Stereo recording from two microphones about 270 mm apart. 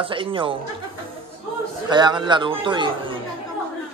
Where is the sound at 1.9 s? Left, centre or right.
Centre.